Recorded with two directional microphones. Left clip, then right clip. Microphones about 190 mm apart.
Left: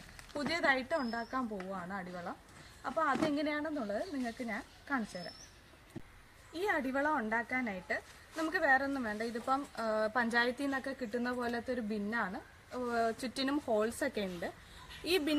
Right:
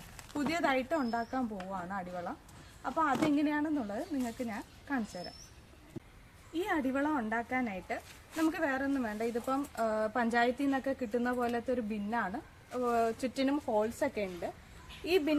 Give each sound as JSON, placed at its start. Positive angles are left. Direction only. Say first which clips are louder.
{"t": 0.5, "sound": "a woman's voice", "louder": "even", "side_deg": 10}
{"t": 6.5, "sound": "a woman's voice", "louder": "right 1 dB", "side_deg": 15}
{"t": 13.3, "sound": "speech", "louder": "right 2 dB", "side_deg": 30}